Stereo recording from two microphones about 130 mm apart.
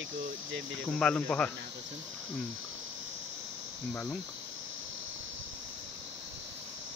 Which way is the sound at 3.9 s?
10° left (ahead or behind).